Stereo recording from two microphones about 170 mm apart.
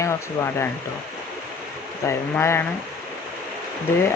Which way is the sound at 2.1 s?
15° left (ahead or behind).